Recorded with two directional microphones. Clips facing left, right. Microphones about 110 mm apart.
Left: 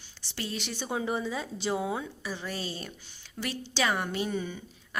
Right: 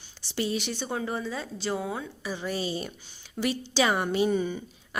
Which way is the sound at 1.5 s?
20° left (ahead or behind).